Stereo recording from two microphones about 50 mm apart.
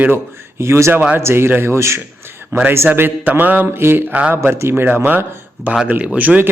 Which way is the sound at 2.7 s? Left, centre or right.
Right.